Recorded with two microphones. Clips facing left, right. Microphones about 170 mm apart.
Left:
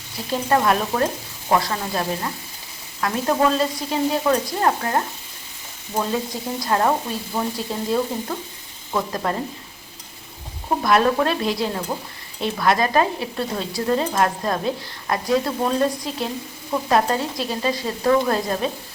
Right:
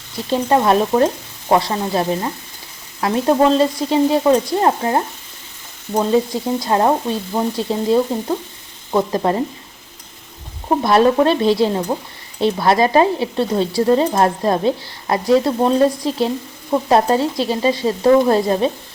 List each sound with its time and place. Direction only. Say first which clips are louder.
0.3 s a woman's voice: right 4 dB; 25° right (ahead or behind)
6.6 s a woman's voice: right 3 dB; 25° right (ahead or behind)
10.7 s a woman's voice: right 5 dB; 30° right (ahead or behind)